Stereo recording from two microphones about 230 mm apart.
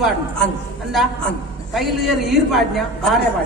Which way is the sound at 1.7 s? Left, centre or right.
Centre.